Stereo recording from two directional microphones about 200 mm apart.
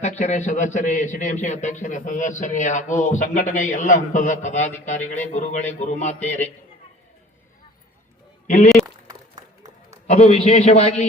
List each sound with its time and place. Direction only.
0.0 s a man's voice: 35° left (ahead or behind)
8.4 s a man's voice: 40° left (ahead or behind)
10.1 s a man's voice: 35° left (ahead or behind)